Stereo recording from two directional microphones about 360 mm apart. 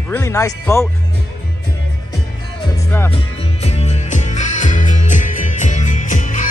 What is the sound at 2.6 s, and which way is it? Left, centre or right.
Music, centre.